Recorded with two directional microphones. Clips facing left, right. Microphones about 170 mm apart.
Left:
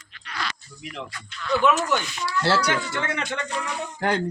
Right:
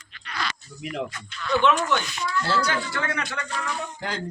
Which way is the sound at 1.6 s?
5° left (ahead or behind).